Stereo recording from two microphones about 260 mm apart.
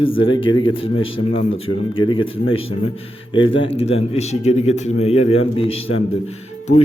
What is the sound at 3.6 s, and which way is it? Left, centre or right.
Speech, left.